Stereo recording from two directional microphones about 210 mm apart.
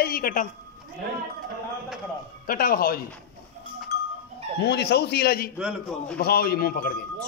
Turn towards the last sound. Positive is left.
turn(degrees=45)  # may be behind; listen again after turning